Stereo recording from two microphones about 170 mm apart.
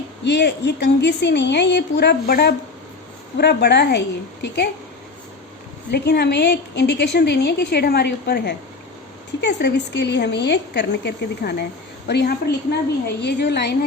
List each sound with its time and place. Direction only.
0.3 s a woman's voice: 90° left
5.9 s a woman's voice: 75° left (ahead or behind)
9.4 s a woman's voice: 85° left